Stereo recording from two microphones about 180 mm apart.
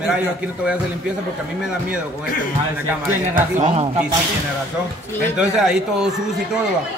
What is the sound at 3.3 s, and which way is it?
Speech, 45° right (ahead or behind).